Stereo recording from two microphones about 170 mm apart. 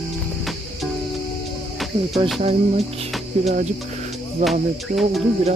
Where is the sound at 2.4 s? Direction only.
35° right (ahead or behind).